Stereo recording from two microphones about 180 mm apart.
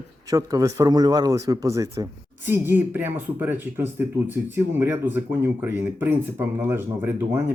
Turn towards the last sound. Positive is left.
turn(degrees=-10)  # may be behind; listen again after turning